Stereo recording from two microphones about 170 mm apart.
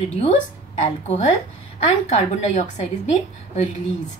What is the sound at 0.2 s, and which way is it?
A woman's voice, 40° left (ahead or behind).